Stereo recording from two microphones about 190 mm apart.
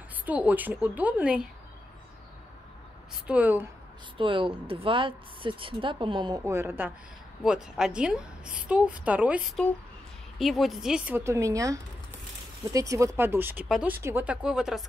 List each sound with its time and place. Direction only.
0.2 s a woman's voice: 10° right (ahead or behind)
3.3 s a woman's voice: 10° right (ahead or behind)
4.2 s speech: 25° right (ahead or behind)
6.4 s a woman's voice: 15° right (ahead or behind)
10.4 s a woman's voice: centre (ahead or behind)